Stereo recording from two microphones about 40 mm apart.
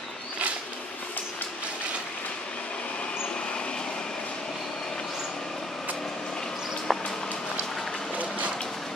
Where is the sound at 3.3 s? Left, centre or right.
Left.